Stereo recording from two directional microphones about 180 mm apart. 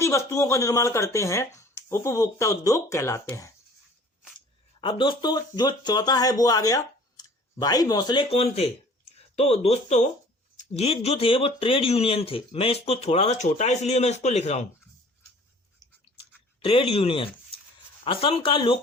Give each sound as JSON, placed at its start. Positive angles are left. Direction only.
{"t": 0.0, "sound": "speech", "side_deg": 15}
{"t": 16.6, "sound": "speech", "side_deg": 30}